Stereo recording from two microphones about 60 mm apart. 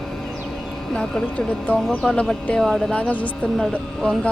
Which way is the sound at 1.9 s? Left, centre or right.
Centre.